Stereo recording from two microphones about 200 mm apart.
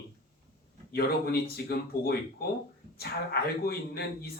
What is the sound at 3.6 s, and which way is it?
Speech, 50° left (ahead or behind).